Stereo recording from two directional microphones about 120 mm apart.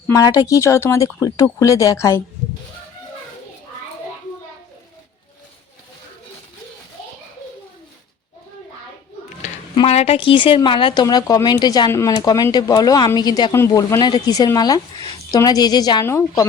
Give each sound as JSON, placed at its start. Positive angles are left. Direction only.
{"t": 0.1, "sound": "speech", "side_deg": 30}
{"t": 9.8, "sound": "speech", "side_deg": 60}
{"t": 10.2, "sound": "speech", "side_deg": 45}
{"t": 11.0, "sound": "speech", "side_deg": 30}
{"t": 11.9, "sound": "speech", "side_deg": 25}